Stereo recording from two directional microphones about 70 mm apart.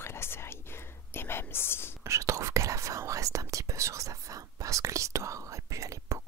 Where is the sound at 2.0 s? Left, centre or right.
Right.